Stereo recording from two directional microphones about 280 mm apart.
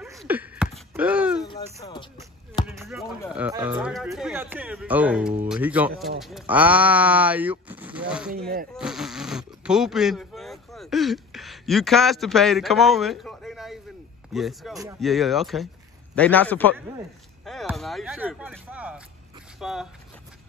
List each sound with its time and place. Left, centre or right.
0.0 s a sound: centre
1.4 s speech: centre
2.8 s speech: centre